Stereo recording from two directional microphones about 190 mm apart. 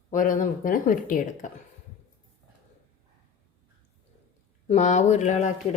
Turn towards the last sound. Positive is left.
turn(degrees=40)  # may be behind; listen again after turning